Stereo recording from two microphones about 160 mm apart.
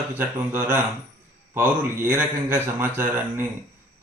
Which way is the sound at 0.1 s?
10° right (ahead or behind).